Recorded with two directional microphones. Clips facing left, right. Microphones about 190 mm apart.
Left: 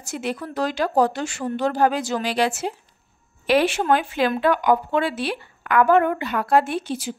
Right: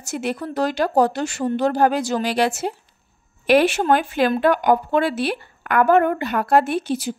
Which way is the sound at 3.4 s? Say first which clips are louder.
Right 3 dB; 55° right (ahead or behind).